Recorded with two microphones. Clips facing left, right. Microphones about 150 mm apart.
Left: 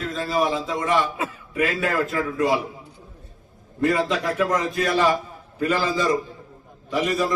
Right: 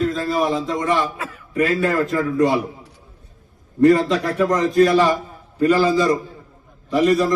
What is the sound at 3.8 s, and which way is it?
A man's voice, centre (ahead or behind).